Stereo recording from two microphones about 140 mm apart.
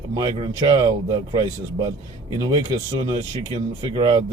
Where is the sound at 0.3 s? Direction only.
35° right (ahead or behind).